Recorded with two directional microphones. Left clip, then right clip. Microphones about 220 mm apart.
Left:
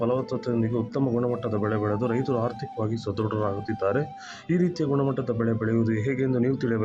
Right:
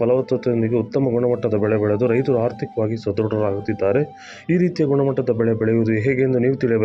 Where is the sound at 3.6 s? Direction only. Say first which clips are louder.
Right 7 dB; 15° right (ahead or behind).